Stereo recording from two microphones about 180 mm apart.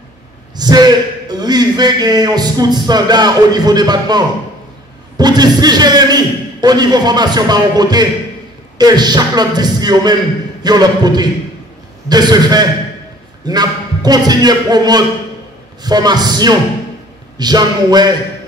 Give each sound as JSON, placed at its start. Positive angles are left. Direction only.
{"t": 0.6, "sound": "a man's voice", "side_deg": -20}